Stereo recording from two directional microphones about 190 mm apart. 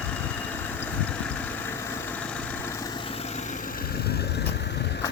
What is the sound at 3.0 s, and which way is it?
Vehicle, 30° left (ahead or behind).